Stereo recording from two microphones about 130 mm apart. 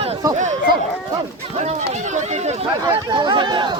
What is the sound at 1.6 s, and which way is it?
Speech, 60° right (ahead or behind).